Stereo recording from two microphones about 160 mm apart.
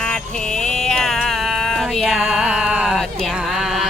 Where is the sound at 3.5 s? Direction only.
Centre (ahead or behind).